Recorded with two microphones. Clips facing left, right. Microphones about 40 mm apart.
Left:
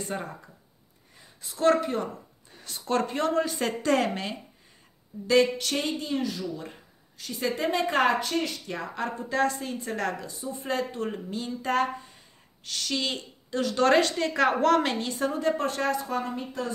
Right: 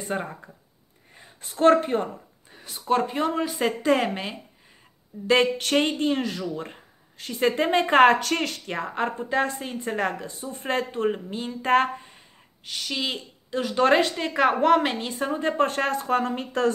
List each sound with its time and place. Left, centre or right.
0.1 s a woman's voice: right
1.1 s speech: right
2.5 s a woman's voice: centre
5.2 s speech: right
8.2 s speech: right
8.7 s a woman's voice: right
10.2 s speech: right
12.6 s a woman's voice: centre
15.6 s speech: right